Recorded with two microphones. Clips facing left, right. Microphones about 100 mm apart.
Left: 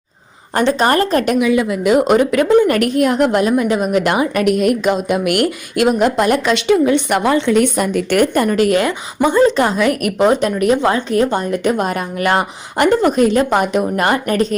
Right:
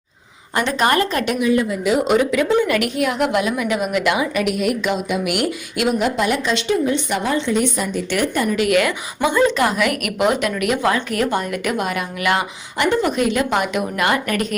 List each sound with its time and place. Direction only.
0.5 s a woman's voice: 30° left (ahead or behind)
1.4 s speech: 90° left; by 2.6 s 50° left (ahead or behind)
2.6 s a woman's voice: 40° left (ahead or behind)
6.4 s a woman's voice: 70° left (ahead or behind); by 14.4 s 30° left (ahead or behind)